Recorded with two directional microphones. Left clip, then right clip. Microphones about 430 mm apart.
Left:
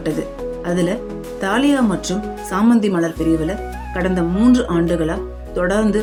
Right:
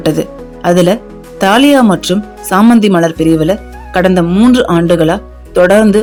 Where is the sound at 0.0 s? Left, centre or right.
Centre.